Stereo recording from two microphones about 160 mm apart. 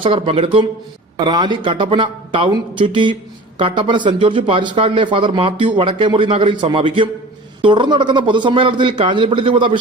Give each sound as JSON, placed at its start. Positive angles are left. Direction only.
{"t": 0.0, "sound": "speech", "side_deg": -35}